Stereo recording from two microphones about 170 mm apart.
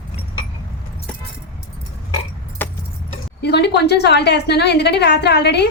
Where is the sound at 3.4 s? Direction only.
75° left (ahead or behind).